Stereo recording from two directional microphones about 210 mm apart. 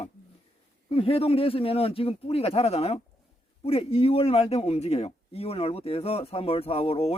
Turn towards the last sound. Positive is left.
turn(degrees=30)  # may be behind; listen again after turning